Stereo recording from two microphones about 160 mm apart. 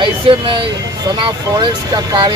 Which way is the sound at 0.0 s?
30° right (ahead or behind).